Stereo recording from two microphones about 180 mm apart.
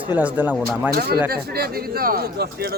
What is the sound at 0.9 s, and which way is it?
A man's voice, 60° right (ahead or behind).